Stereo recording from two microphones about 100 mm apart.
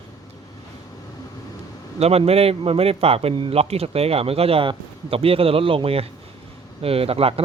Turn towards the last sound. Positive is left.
turn(degrees=-75)  # may be behind; listen again after turning